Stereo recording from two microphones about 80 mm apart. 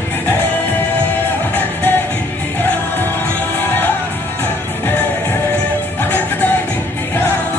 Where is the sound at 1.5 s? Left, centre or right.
Left.